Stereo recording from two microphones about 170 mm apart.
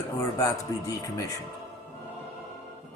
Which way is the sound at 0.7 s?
20° left (ahead or behind).